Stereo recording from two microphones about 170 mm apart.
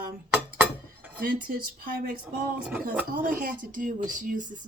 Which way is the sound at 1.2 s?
55° right (ahead or behind).